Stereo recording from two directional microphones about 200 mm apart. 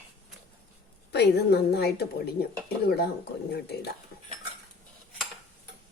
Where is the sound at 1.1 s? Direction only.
55° left (ahead or behind).